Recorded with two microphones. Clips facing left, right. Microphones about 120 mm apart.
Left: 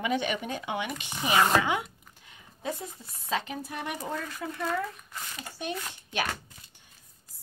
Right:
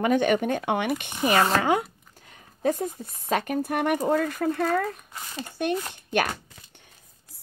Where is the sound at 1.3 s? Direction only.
45° right (ahead or behind).